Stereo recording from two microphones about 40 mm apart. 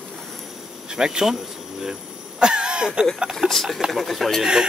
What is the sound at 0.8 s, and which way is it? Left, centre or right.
Speech, centre.